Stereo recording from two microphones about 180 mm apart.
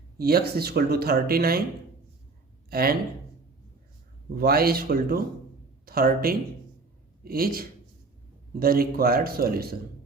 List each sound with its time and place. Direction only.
0.2 s speech: 60° right (ahead or behind)
2.6 s speech: 55° right (ahead or behind)
4.4 s speech: 55° right (ahead or behind)